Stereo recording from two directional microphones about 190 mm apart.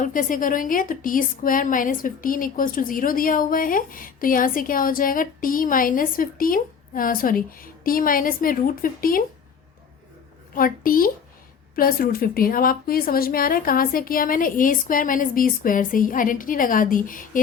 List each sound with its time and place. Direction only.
0.0 s a woman's voice: 45° left (ahead or behind)
10.5 s a woman's voice: 50° left (ahead or behind)